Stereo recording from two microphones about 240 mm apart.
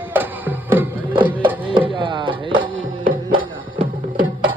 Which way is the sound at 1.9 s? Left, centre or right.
Centre.